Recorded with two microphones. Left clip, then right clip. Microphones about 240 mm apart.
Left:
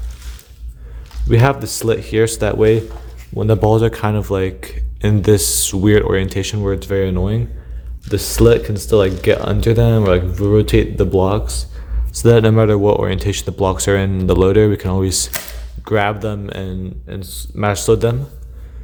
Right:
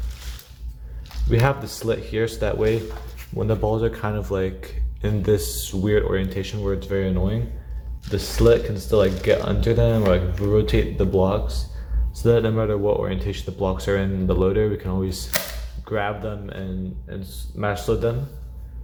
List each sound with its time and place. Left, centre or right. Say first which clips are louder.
1.3 s speech: left 6 dB; left